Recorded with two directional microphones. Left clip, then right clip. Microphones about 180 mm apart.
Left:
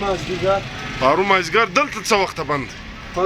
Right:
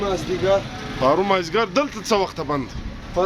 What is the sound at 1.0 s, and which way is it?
Speech, 10° right (ahead or behind).